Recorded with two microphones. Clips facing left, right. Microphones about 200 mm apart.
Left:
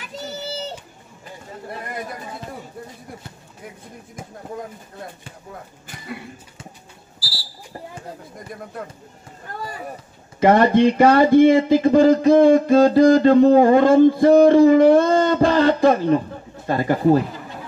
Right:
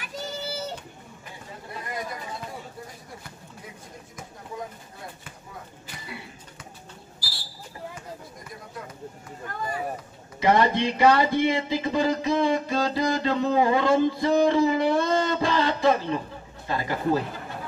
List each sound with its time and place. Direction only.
10.4 s speech: 50° left (ahead or behind)